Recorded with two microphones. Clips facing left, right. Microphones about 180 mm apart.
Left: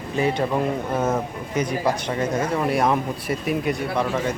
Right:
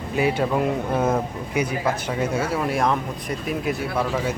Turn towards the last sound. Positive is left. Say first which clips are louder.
# left 1 dB
turn(degrees=-5)  # may be behind; listen again after turning